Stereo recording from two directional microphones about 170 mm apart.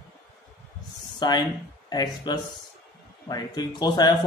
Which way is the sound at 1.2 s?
25° left (ahead or behind).